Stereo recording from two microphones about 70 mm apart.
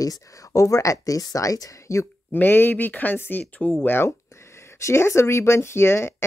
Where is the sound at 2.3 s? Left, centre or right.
Left.